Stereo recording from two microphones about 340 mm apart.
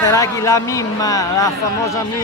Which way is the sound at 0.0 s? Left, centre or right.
Centre.